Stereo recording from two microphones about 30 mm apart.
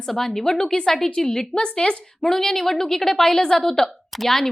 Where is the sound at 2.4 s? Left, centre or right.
Centre.